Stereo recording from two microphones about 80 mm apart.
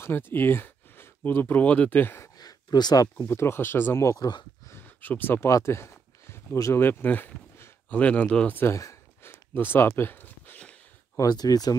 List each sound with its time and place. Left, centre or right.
0.0 s speech: left
2.3 s a sound: left
3.3 s speech: left
4.2 s speech: left
4.8 s speech: left
7.9 s speech: centre
8.7 s a sound: left; by 10.8 s centre
11.2 s speech: left